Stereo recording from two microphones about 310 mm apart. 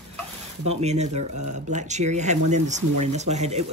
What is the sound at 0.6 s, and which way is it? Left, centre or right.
Speech, right.